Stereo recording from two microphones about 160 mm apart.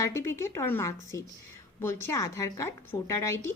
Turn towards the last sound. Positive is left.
turn(degrees=15)  # may be behind; listen again after turning